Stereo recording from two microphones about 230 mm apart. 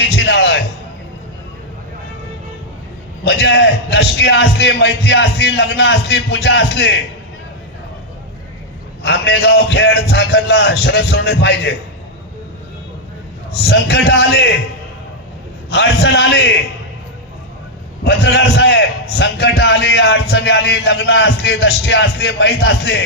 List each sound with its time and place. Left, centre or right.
0.2 s music: left
3.2 s a man's voice: left
9.0 s a man's voice: left
13.6 s a man's voice: left
15.7 s a man's voice: left
18.0 s a man's voice: left